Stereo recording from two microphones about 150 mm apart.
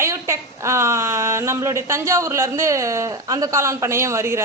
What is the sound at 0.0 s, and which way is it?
Speech, 20° right (ahead or behind).